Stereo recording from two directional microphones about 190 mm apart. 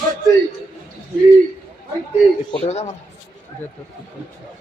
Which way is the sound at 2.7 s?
35° left (ahead or behind).